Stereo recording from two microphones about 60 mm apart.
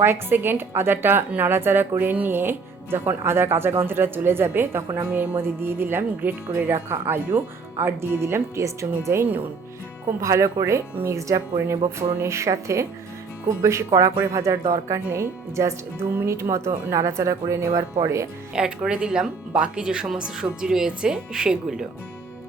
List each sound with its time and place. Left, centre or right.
0.0 s speech: right
6.9 s speech: right
18.5 s speech: centre